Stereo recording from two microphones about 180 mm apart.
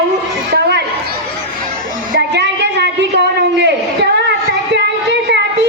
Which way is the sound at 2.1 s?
75° right (ahead or behind).